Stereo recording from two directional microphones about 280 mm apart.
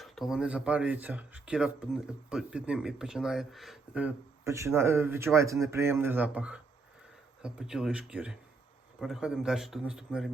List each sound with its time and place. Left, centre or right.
0.0 s speech: centre